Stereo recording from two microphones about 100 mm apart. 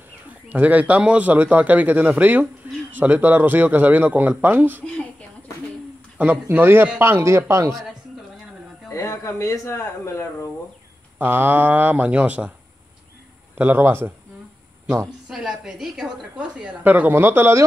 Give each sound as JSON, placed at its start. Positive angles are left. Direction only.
{"t": 0.3, "sound": "a woman's voice", "side_deg": -15}
{"t": 6.1, "sound": "a man's voice", "side_deg": -15}
{"t": 8.9, "sound": "speech", "side_deg": 30}
{"t": 11.1, "sound": "a woman's voice", "side_deg": -20}
{"t": 13.6, "sound": "a man's voice", "side_deg": -20}
{"t": 15.2, "sound": "a woman's voice", "side_deg": -5}